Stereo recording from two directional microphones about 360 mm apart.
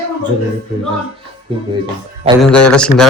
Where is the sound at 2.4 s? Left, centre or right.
Centre.